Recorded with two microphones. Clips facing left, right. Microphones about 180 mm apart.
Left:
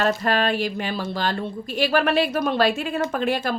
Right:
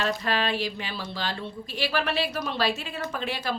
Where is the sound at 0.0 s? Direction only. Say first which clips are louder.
Left 6 dB; 45° left (ahead or behind).